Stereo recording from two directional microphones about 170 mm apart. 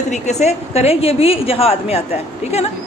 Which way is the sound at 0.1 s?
40° left (ahead or behind).